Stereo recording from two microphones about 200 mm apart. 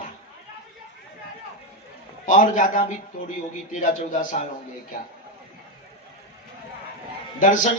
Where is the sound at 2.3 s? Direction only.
40° left (ahead or behind).